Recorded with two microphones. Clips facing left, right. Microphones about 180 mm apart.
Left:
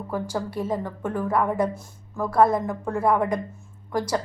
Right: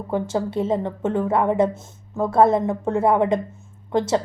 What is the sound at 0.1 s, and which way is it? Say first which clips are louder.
A woman's voice: right 6 dB; 25° right (ahead or behind).